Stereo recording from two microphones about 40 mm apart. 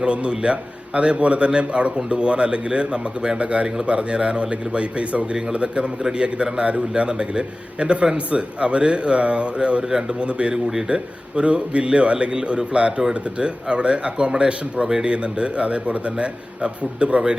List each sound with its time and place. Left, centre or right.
0.0 s a man's voice: right
6.0 s a man's voice: centre
6.2 s a man's voice: right
10.2 s a man's voice: right
10.5 s a man's voice: centre
10.8 s a man's voice: right